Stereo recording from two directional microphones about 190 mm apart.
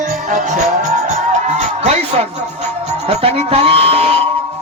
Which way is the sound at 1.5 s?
40° right (ahead or behind).